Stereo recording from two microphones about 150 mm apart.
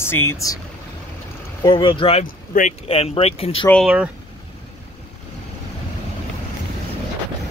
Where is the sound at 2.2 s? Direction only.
70° left (ahead or behind).